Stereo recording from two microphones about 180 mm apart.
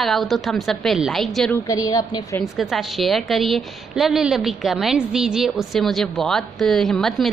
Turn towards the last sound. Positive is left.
turn(degrees=0)  # may be behind; listen again after turning